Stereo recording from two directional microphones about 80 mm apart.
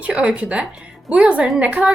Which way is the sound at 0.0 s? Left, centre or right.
Centre.